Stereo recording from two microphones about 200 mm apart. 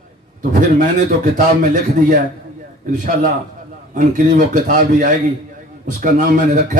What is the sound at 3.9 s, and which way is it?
A man's voice, 40° right (ahead or behind).